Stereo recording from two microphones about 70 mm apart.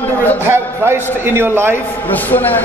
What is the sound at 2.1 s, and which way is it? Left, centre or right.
Speech, left.